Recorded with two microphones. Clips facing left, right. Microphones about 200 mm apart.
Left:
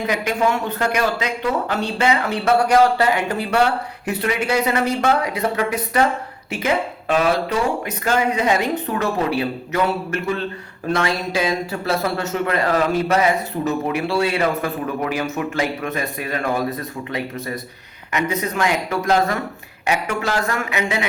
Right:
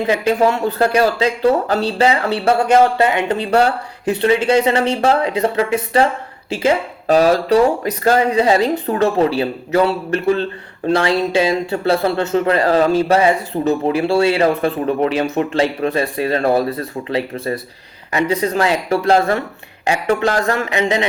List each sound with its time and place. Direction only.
0.1 s speech: 30° right (ahead or behind)